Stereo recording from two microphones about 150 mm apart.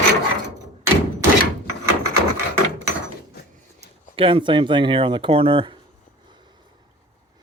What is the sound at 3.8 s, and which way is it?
Speech, 35° right (ahead or behind).